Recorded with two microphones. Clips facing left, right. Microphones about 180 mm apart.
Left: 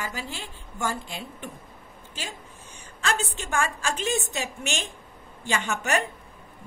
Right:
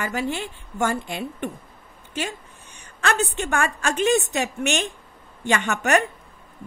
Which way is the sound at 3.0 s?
65° right (ahead or behind).